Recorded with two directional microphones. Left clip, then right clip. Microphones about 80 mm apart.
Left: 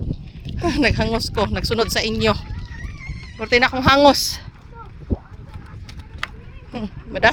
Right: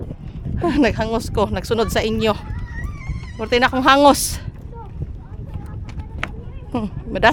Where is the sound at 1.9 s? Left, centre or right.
Centre.